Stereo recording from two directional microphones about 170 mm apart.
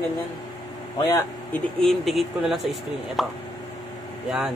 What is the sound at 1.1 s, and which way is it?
Speech, 15° left (ahead or behind).